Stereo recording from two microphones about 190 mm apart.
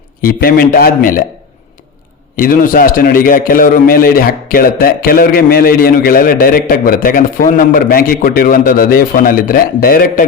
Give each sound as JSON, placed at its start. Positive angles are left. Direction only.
{"t": 0.2, "sound": "a man's voice", "side_deg": 50}
{"t": 2.3, "sound": "a man's voice", "side_deg": 45}